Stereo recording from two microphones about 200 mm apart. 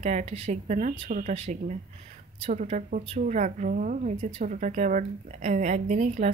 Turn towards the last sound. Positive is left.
turn(degrees=-35)  # may be behind; listen again after turning